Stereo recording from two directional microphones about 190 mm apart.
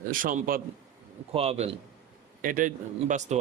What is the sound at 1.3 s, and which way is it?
Speech, 30° right (ahead or behind).